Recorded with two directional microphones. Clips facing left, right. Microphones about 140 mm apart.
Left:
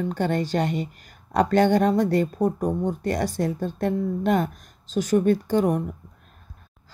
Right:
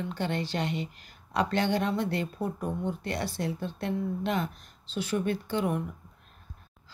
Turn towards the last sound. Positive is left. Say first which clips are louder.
# left 8 dB
turn(degrees=40)  # may be behind; listen again after turning